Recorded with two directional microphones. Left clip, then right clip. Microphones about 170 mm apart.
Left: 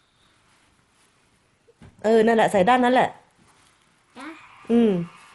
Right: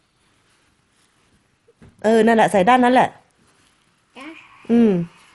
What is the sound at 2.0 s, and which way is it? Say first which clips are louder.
Speech: right 3 dB; 30° right (ahead or behind).